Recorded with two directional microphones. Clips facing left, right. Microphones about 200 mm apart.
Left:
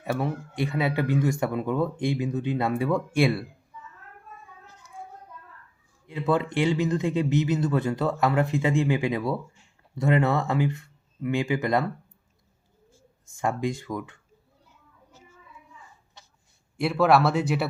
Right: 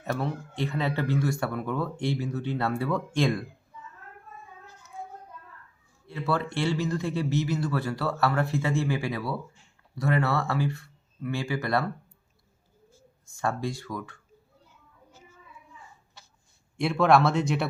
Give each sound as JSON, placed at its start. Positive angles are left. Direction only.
{"t": 0.0, "sound": "speech", "side_deg": 10}
{"t": 6.1, "sound": "speech", "side_deg": 15}
{"t": 13.4, "sound": "speech", "side_deg": 15}
{"t": 16.7, "sound": "speech", "side_deg": 0}